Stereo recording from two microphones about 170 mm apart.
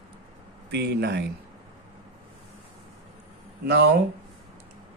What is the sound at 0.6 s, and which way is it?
Speech, 75° right (ahead or behind).